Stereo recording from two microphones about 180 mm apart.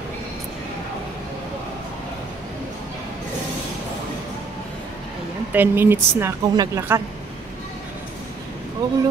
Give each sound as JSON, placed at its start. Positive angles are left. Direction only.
{"t": 5.5, "sound": "speech", "side_deg": -10}
{"t": 8.8, "sound": "speech", "side_deg": -20}